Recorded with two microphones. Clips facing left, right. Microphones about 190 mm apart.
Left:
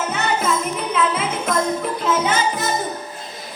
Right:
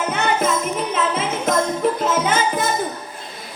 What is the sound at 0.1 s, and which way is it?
Music, 55° right (ahead or behind).